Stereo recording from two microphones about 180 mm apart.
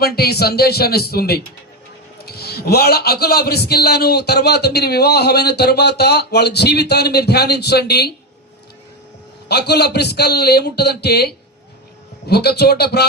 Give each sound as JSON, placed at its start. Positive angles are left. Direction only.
{"t": 0.0, "sound": "a man's voice", "side_deg": 60}
{"t": 9.5, "sound": "a man's voice", "side_deg": 65}
{"t": 12.3, "sound": "a man's voice", "side_deg": 65}